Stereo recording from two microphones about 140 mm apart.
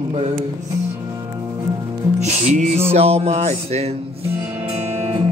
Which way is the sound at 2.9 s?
45° right (ahead or behind).